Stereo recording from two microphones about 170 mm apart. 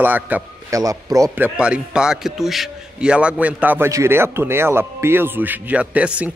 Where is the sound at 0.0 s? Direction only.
10° right (ahead or behind).